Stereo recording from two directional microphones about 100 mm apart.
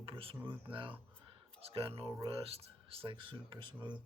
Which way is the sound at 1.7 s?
75° right (ahead or behind).